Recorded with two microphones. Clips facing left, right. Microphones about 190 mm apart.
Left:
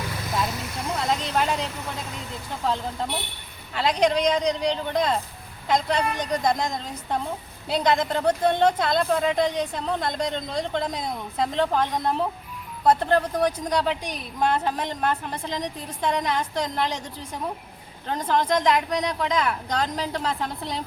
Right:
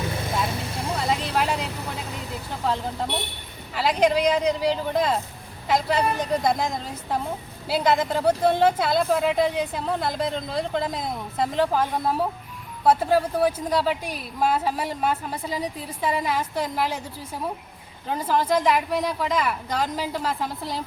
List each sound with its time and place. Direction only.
0.3 s vehicle: 30° right (ahead or behind)
0.9 s vehicle: centre (ahead or behind)
2.5 s speech: centre (ahead or behind)